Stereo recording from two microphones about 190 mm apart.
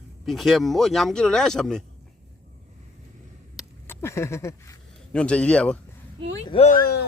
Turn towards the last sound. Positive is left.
turn(degrees=55)  # may be behind; listen again after turning